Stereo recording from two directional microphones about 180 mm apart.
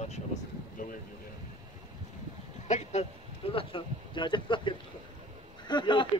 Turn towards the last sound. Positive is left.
turn(degrees=25)  # may be behind; listen again after turning